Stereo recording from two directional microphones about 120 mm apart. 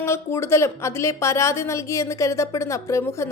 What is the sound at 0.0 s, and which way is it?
A woman's voice, 20° left (ahead or behind).